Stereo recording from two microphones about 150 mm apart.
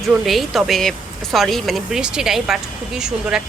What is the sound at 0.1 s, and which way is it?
Speech, centre (ahead or behind).